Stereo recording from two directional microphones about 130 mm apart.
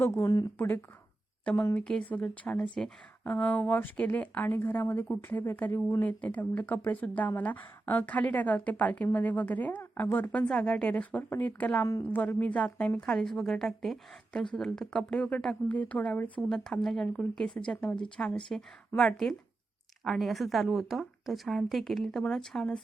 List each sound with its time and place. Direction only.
0.0 s speech: 20° left (ahead or behind)
1.8 s a woman's voice: 5° left (ahead or behind)